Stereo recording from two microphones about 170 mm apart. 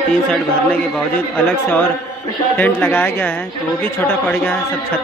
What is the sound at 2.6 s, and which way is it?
Speech, 10° left (ahead or behind).